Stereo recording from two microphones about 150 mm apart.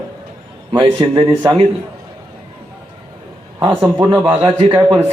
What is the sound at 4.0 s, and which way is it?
A man's voice, 30° right (ahead or behind).